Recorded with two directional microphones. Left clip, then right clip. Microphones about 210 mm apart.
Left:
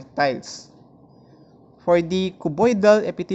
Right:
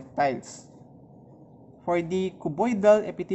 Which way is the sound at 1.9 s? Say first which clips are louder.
Left 7 dB; 20° left (ahead or behind).